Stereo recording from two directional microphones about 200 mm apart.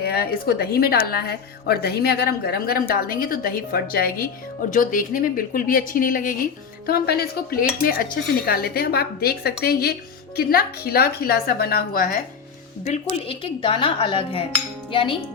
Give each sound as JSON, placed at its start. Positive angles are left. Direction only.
{"t": 0.0, "sound": "speech", "side_deg": 50}
{"t": 12.8, "sound": "speech", "side_deg": 30}